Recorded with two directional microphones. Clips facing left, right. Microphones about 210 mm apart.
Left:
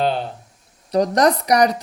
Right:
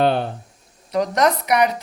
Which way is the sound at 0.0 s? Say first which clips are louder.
Right 3 dB; 60° right (ahead or behind).